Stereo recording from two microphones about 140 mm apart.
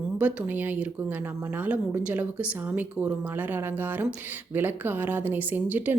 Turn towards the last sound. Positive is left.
turn(degrees=-15)  # may be behind; listen again after turning